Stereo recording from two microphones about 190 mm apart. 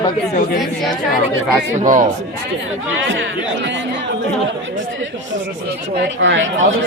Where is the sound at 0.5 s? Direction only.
Centre (ahead or behind).